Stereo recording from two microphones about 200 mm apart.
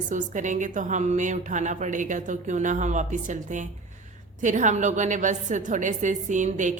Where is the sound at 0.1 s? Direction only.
40° right (ahead or behind).